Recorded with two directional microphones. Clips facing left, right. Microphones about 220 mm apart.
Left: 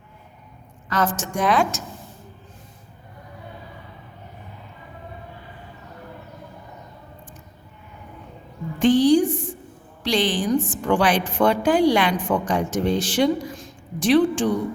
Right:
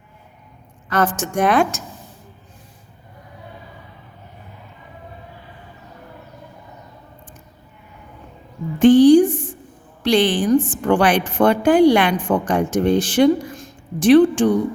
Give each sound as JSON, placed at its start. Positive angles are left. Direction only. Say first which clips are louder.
{"t": 0.9, "sound": "a woman's voice", "louder": "right 4 dB", "side_deg": -55}
{"t": 8.8, "sound": "a sound", "louder": "right 6 dB", "side_deg": -50}
{"t": 10.0, "sound": "a woman's voice", "louder": "right 5 dB", "side_deg": -55}